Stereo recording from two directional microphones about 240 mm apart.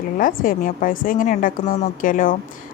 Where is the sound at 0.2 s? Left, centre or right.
Left.